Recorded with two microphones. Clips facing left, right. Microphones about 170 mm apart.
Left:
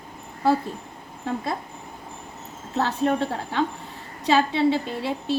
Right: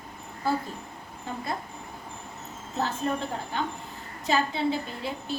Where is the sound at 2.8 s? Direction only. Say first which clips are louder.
Left 6 dB; 80° left.